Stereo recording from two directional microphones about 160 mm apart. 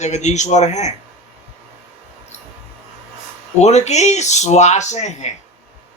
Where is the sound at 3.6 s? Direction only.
45° left (ahead or behind).